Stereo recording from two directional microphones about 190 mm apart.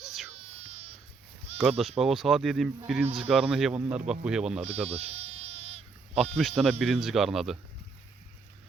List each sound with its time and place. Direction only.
0.0 s baby cry: centre (ahead or behind)
0.3 s baby cry: 35° right (ahead or behind)
1.5 s bleat: 30° right (ahead or behind)
2.0 s speech: centre (ahead or behind)
4.6 s insect: 30° right (ahead or behind)
6.6 s speech: centre (ahead or behind)